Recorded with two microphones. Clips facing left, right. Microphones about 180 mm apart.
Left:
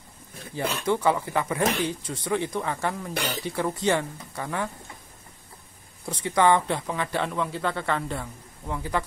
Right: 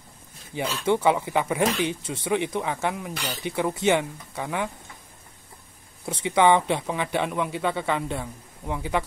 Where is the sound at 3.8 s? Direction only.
5° right (ahead or behind).